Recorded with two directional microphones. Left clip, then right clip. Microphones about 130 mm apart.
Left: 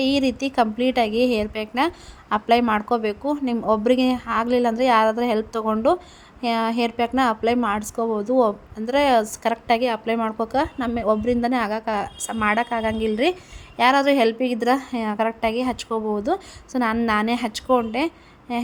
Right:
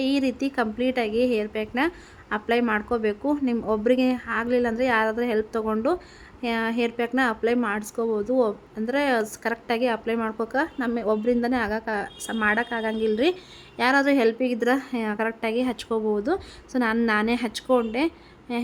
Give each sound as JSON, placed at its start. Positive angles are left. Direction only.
{"t": 0.0, "sound": "a woman's voice", "side_deg": 25}